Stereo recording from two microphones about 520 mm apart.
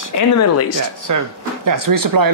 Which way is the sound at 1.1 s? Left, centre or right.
Right.